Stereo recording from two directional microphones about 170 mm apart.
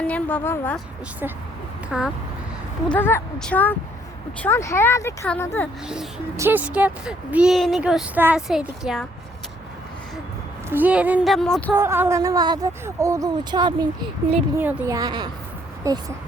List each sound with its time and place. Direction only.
0.0 s a woman's voice: 10° left (ahead or behind)
1.9 s speech: centre (ahead or behind)
6.3 s speech: 15° right (ahead or behind)
10.7 s speech: 10° right (ahead or behind)
11.7 s speech: 15° right (ahead or behind)